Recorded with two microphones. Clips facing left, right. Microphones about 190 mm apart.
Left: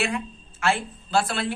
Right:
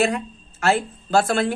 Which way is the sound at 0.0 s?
40° right (ahead or behind).